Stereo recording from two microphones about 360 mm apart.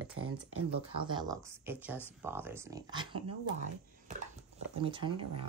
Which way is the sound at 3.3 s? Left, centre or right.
Right.